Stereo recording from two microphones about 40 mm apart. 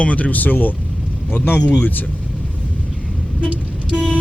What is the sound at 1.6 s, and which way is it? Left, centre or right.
Speech, left.